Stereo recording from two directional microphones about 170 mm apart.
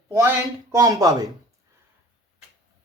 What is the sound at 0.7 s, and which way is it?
Speech, 20° right (ahead or behind).